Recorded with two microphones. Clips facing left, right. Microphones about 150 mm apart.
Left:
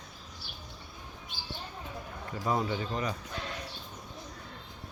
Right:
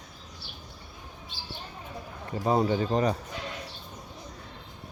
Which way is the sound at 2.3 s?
30° right (ahead or behind).